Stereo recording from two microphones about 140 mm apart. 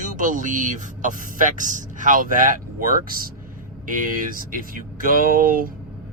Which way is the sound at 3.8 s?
70° right (ahead or behind).